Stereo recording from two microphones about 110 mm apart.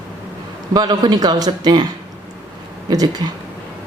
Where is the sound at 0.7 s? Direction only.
40° right (ahead or behind).